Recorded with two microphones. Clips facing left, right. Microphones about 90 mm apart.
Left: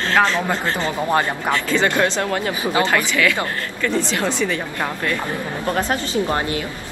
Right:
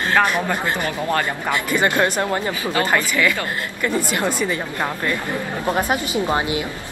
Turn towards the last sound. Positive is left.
turn(degrees=-10)  # may be behind; listen again after turning